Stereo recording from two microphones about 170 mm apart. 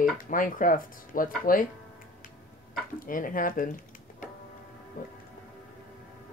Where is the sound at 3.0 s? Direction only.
55° left (ahead or behind).